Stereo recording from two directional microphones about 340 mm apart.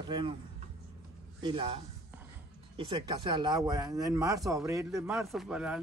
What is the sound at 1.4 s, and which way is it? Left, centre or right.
Speech, centre.